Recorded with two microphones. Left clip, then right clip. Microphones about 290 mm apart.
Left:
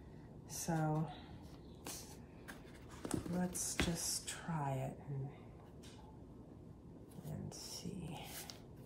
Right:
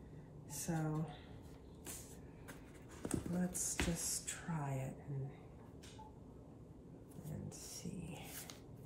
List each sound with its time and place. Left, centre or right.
0.5 s a woman's voice: centre
3.0 s speech: centre
7.2 s a sound: centre